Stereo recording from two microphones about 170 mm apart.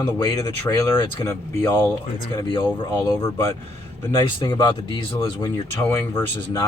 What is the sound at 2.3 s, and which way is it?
Speech, 30° left (ahead or behind).